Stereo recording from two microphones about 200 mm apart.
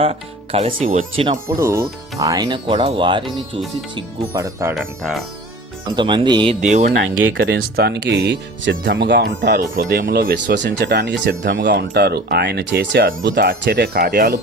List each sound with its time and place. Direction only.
0.0 s speech: 30° right (ahead or behind)
1.5 s speech: 15° right (ahead or behind)
4.7 s speech: centre (ahead or behind)
6.0 s speech: 20° right (ahead or behind)
6.6 s speech: 35° right (ahead or behind)
7.3 s speech: 60° right (ahead or behind)